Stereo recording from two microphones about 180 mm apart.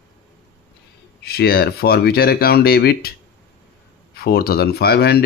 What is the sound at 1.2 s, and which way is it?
Speech, 60° left (ahead or behind).